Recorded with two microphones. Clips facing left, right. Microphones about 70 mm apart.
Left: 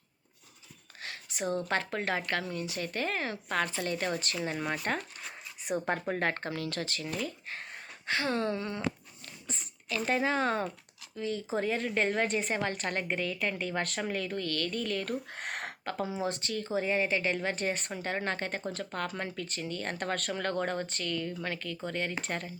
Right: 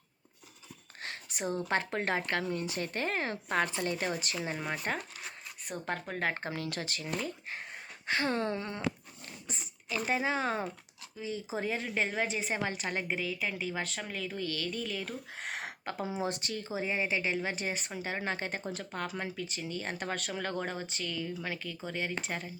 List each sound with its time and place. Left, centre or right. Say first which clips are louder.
1.0 s a sound: left 2 dB; right
1.7 s speech: even; right
4.5 s a woman's voice: left 3 dB; centre
5.6 s speech: left 6 dB; centre
6.3 s speech: left 1 dB; right
9.6 s a woman's voice: left 1 dB; centre
14.3 s speech: left 3 dB; centre
15.8 s speech: left 2 dB; centre